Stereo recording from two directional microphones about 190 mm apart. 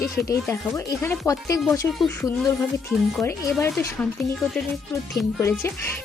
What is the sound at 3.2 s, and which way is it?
Speech, 10° left (ahead or behind).